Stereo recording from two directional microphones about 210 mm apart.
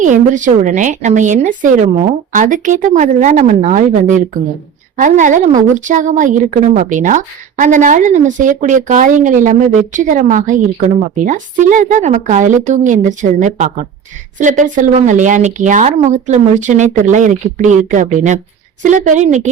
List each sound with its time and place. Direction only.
0.0 s a woman's voice: 35° right (ahead or behind)